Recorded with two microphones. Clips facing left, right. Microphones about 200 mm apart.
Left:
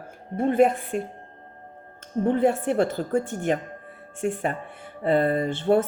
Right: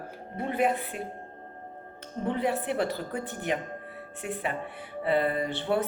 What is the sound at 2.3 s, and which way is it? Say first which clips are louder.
Speech: left 7 dB; 45° left (ahead or behind).